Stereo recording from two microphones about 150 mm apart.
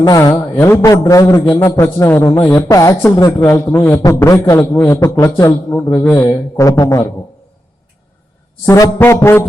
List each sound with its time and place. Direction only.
0.0 s a man's voice: 20° left (ahead or behind)
8.6 s music: 15° left (ahead or behind)